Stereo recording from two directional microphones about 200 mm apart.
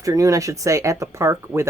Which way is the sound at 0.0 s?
15° right (ahead or behind).